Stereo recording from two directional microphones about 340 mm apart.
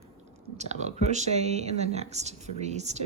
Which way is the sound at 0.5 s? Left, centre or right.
Centre.